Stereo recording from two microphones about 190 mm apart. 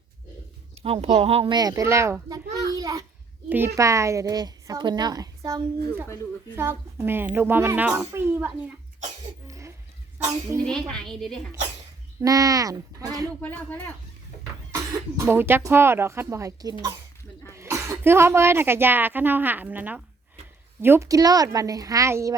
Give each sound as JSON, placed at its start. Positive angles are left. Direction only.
{"t": 1.0, "sound": "a child's voice", "side_deg": -35}
{"t": 9.5, "sound": "a sound", "side_deg": -15}
{"t": 10.6, "sound": "a woman's voice", "side_deg": 5}
{"t": 12.2, "sound": "a child's voice", "side_deg": -20}
{"t": 13.4, "sound": "speech", "side_deg": 10}
{"t": 14.7, "sound": "speech", "side_deg": -15}